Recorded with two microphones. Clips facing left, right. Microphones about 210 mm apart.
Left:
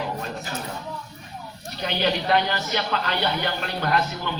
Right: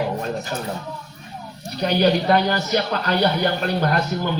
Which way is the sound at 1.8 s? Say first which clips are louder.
Right 7 dB; 40° right (ahead or behind).